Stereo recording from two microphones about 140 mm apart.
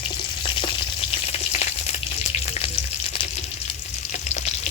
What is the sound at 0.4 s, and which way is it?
Frying, 40° left (ahead or behind).